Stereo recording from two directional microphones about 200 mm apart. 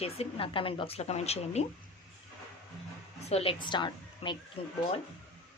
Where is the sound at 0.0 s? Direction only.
30° left (ahead or behind).